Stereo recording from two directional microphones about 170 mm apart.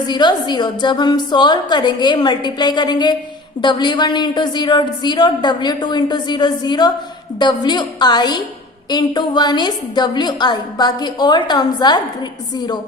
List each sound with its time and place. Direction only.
0.1 s a woman's voice: 25° left (ahead or behind)